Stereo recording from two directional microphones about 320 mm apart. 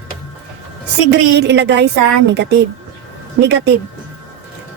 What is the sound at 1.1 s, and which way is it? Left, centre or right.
Speech, right.